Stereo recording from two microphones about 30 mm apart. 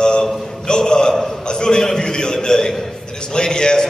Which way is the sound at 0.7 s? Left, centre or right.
Left.